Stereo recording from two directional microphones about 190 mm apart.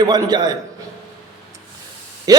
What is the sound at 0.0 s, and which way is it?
Speech, 20° right (ahead or behind).